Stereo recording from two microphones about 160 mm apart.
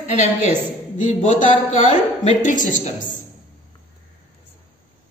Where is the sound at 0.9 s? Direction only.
50° left (ahead or behind).